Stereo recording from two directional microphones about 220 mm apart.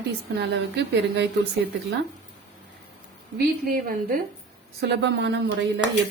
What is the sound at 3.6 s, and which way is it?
Speech, 40° right (ahead or behind).